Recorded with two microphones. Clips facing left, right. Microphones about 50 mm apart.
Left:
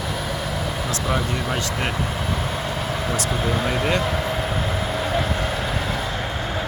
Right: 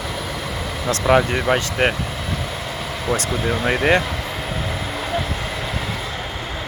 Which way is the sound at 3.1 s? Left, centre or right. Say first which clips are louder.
Right 6 dB; right.